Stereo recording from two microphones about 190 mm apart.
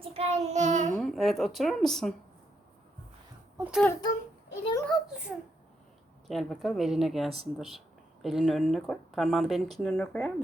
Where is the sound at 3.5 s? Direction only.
10° right (ahead or behind).